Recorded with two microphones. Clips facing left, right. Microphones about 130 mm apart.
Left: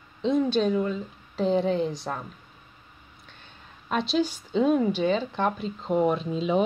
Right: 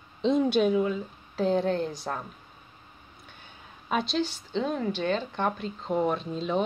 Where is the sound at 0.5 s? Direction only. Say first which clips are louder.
Right 1 dB; 5° right (ahead or behind).